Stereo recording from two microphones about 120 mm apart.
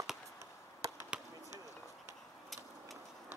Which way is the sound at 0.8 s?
25° right (ahead or behind).